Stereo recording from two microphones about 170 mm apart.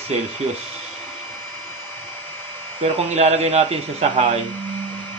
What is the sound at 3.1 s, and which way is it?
A man's voice, 40° right (ahead or behind).